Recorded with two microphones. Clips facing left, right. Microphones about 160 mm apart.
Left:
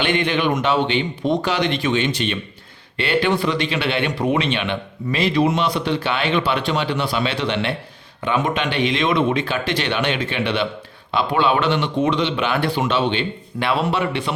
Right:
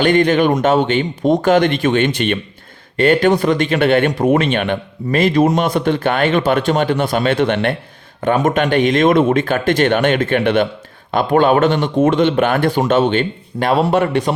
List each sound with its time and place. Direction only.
0.0 s speech: 40° right (ahead or behind)